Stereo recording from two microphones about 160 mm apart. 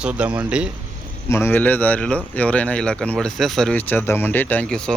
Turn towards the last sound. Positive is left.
turn(degrees=5)  # may be behind; listen again after turning